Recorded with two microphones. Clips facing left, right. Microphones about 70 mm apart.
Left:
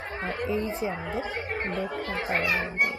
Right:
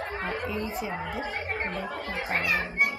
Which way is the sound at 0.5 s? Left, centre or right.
Left.